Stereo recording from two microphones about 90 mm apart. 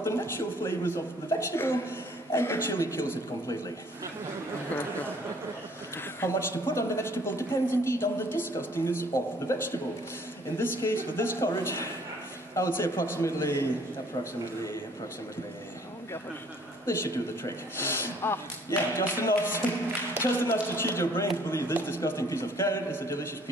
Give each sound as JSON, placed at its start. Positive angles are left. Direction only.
{"t": 0.0, "sound": "a woman's voice", "side_deg": 30}
{"t": 6.2, "sound": "a woman's voice", "side_deg": 30}
{"t": 16.8, "sound": "a woman's voice", "side_deg": 30}